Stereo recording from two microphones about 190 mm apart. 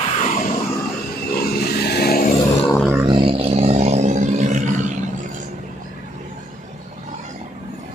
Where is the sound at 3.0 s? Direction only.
25° right (ahead or behind).